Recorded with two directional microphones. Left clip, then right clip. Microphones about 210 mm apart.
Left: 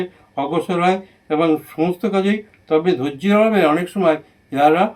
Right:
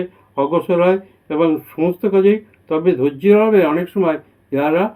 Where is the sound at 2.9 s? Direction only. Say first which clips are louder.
Right 5 dB; 40° right (ahead or behind).